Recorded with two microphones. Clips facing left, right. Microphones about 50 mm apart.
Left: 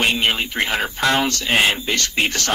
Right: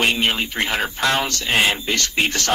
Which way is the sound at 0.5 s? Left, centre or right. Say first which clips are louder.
Left 1 dB; centre.